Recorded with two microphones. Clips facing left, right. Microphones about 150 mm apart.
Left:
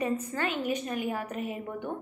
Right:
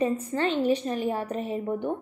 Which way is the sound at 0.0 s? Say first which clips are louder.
Right 5 dB; 25° right (ahead or behind).